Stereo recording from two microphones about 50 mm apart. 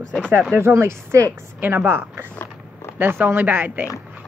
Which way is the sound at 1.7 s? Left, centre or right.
Right.